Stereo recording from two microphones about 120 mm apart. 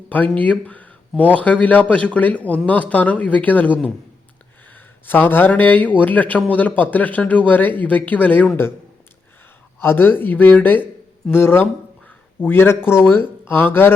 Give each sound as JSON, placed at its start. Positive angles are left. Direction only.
{"t": 0.1, "sound": "speech", "side_deg": 15}
{"t": 9.8, "sound": "speech", "side_deg": 15}